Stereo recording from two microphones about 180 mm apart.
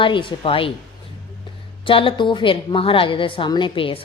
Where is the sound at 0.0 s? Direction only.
25° left (ahead or behind).